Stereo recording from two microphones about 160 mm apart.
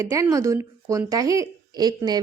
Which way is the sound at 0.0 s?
20° right (ahead or behind).